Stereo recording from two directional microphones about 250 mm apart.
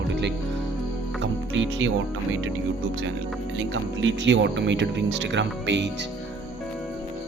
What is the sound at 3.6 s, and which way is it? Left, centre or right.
Speech, right.